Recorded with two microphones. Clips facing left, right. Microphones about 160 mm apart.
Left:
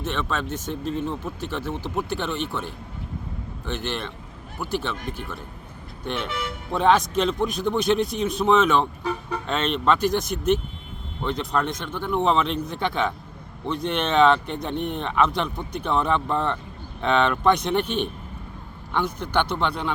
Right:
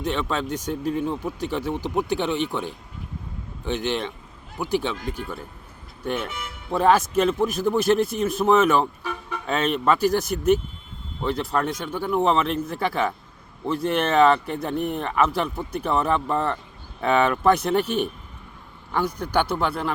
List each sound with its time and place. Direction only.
0.0 s speech: 15° right (ahead or behind)
6.7 s speech: 5° right (ahead or behind)